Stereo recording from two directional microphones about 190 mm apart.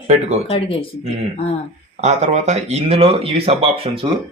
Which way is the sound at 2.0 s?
35° right (ahead or behind).